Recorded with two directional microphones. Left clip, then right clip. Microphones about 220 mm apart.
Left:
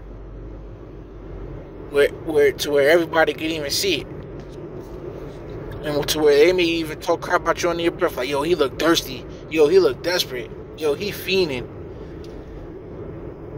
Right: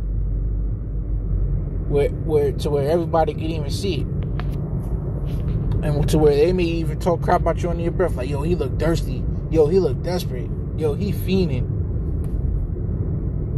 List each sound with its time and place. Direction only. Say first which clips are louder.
2.0 s a man's voice: left 2 dB; 25° left (ahead or behind)
5.9 s a man's voice: left 1 dB; 15° left (ahead or behind)